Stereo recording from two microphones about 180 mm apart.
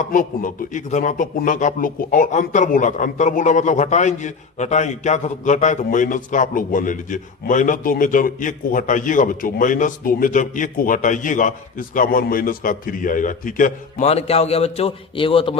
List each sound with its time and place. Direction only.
0.1 s speech: 50° left (ahead or behind); by 15.5 s 30° left (ahead or behind)